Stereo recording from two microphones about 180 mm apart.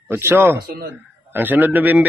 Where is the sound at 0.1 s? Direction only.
10° right (ahead or behind).